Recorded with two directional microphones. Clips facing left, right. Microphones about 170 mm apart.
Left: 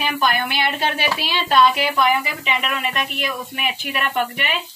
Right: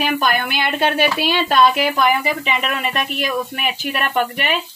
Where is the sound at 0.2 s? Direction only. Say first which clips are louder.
Right 1 dB; 50° right (ahead or behind).